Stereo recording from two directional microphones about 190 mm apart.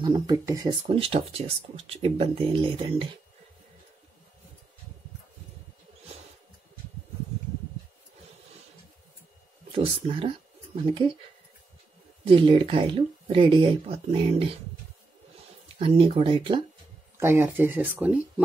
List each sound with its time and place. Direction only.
0.0 s speech: 20° right (ahead or behind)
9.7 s speech: 30° right (ahead or behind)
12.3 s speech: 25° right (ahead or behind)
15.8 s speech: 30° right (ahead or behind)
17.2 s speech: 15° right (ahead or behind)